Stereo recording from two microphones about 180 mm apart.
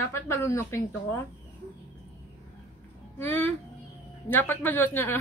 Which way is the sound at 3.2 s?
10° left (ahead or behind).